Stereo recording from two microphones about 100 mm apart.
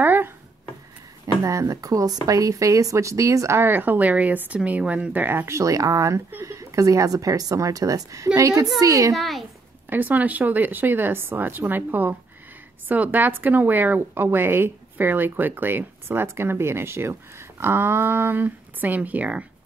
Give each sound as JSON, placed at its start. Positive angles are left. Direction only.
{"t": 0.0, "sound": "a sound", "side_deg": -20}
{"t": 1.4, "sound": "a woman's voice", "side_deg": -35}
{"t": 9.1, "sound": "a child's voice", "side_deg": 0}
{"t": 9.8, "sound": "a woman's voice", "side_deg": -15}